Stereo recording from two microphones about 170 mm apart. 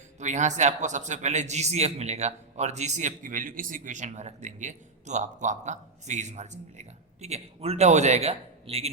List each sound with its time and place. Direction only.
0.2 s a man's voice: 45° right (ahead or behind)